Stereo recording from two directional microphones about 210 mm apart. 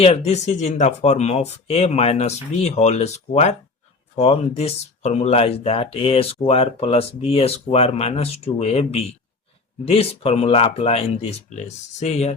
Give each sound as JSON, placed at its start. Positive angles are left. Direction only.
{"t": 0.0, "sound": "speech", "side_deg": 30}